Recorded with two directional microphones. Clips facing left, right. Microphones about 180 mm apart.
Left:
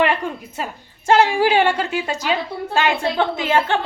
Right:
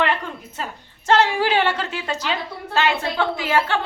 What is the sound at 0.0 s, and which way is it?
A woman's voice, 10° left (ahead or behind).